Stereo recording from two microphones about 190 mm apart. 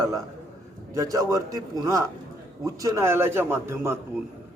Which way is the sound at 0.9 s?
15° right (ahead or behind).